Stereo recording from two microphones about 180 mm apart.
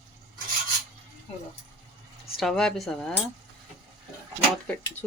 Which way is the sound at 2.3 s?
Centre (ahead or behind).